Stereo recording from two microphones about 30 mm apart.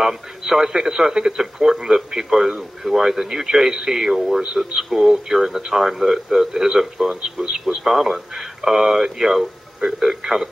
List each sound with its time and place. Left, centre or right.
0.0 s a man's voice: centre
7.2 s a man's voice: right